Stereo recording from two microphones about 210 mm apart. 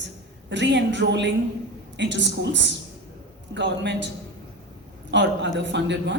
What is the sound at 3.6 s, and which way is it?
Speech, 55° right (ahead or behind).